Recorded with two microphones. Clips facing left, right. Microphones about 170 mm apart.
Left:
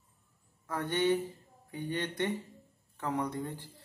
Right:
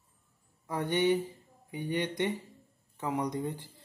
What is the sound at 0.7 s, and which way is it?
Speech, 15° right (ahead or behind).